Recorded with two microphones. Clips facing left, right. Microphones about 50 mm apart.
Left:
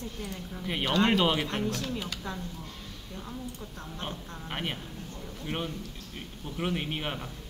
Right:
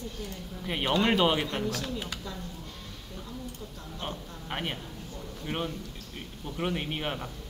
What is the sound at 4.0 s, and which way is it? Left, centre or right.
Speech, centre.